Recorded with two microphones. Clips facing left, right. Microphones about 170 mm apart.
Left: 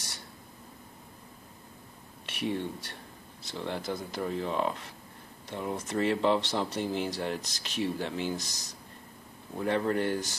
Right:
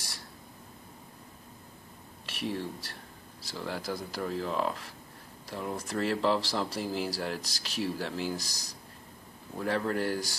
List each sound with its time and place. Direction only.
2.2 s speech: centre (ahead or behind)
8.4 s speech: 35° right (ahead or behind)
9.6 s speech: centre (ahead or behind)